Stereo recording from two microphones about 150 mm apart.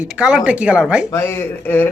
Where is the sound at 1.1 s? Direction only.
15° left (ahead or behind).